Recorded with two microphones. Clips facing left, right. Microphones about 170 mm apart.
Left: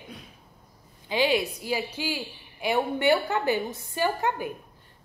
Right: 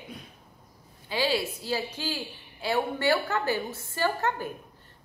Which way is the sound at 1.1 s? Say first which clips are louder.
Left 3 dB; 20° left (ahead or behind).